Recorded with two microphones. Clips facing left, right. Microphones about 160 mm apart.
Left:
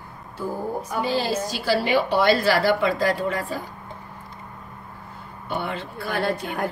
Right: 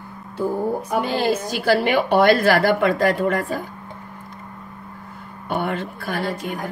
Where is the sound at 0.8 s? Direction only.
60° right (ahead or behind).